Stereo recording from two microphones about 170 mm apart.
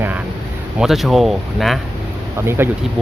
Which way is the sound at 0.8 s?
Centre (ahead or behind).